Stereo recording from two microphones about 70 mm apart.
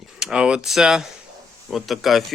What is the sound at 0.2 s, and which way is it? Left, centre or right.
Speech, centre.